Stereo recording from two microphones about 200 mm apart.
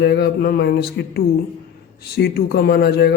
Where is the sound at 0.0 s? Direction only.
55° left (ahead or behind).